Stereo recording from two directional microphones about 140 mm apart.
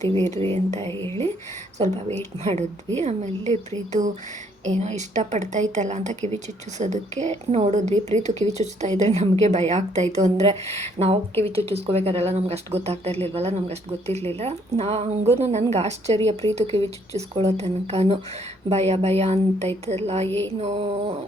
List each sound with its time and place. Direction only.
0.5 s a woman's voice: 45° right (ahead or behind)
2.0 s a woman's voice: 50° right (ahead or behind)
4.6 s a woman's voice: 55° right (ahead or behind)
20.2 s music: 15° left (ahead or behind)
20.6 s a woman's voice: 45° right (ahead or behind)